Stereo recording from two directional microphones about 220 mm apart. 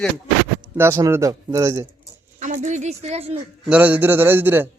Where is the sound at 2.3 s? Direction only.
35° right (ahead or behind).